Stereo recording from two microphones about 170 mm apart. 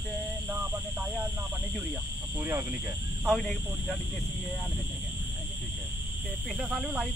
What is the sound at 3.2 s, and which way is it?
Speech, centre (ahead or behind).